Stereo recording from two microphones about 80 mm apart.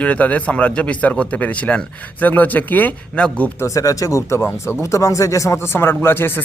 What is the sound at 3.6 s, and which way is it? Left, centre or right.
Speech, left.